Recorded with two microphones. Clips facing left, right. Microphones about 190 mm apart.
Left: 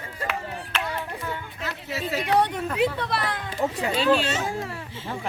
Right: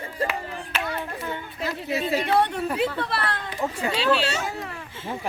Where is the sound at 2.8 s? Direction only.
15° left (ahead or behind).